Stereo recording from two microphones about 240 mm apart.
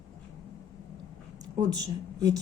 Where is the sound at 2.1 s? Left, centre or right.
Centre.